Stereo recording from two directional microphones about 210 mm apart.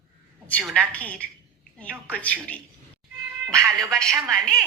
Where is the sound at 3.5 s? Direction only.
15° right (ahead or behind).